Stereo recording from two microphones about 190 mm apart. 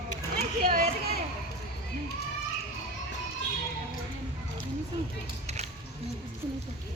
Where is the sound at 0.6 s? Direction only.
50° right (ahead or behind).